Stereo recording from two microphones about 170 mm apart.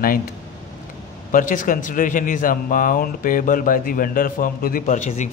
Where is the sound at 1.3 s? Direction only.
55° left (ahead or behind).